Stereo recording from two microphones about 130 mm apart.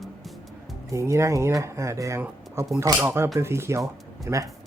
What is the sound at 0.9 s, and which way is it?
Speech, 25° right (ahead or behind).